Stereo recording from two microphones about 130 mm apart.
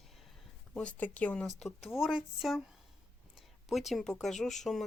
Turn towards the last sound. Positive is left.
turn(degrees=0)  # may be behind; listen again after turning